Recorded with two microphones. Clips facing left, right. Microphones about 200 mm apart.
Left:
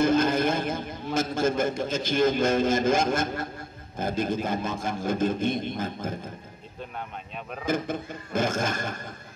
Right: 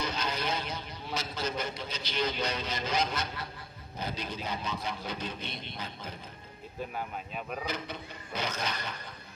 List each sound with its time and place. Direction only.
0.0 s a man's voice: 50° left (ahead or behind)
7.6 s a man's voice: 50° left (ahead or behind)